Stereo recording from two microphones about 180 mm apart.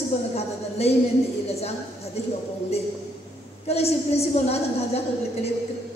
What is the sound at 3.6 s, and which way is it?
A woman's voice, 35° left (ahead or behind).